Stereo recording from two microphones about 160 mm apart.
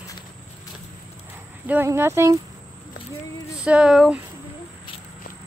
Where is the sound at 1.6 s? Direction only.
15° right (ahead or behind).